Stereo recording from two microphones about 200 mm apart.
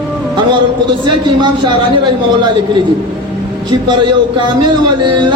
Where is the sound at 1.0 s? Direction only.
25° right (ahead or behind).